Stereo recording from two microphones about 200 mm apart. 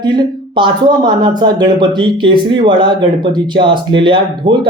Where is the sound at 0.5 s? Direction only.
25° right (ahead or behind).